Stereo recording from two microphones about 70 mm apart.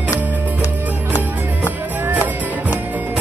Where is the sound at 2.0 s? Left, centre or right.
Right.